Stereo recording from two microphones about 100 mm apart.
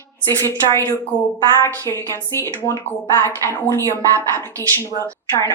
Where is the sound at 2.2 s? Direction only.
25° left (ahead or behind).